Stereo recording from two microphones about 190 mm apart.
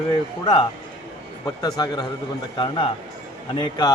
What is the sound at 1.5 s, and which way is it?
A man's voice, 20° left (ahead or behind).